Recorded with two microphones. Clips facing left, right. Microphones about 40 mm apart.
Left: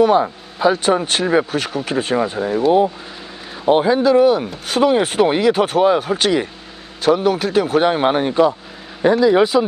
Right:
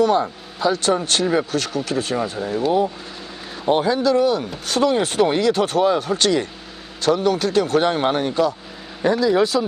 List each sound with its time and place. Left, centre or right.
0.0 s speech: centre